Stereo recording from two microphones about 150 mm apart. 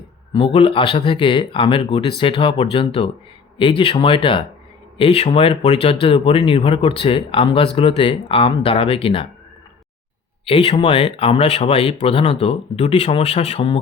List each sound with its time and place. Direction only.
0.3 s speech: 35° left (ahead or behind)
10.4 s speech: 40° left (ahead or behind)